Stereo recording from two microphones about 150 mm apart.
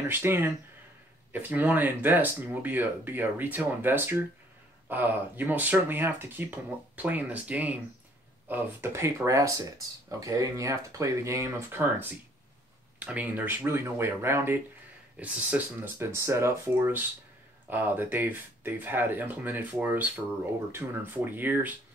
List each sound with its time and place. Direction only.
0.1 s speech: 15° right (ahead or behind)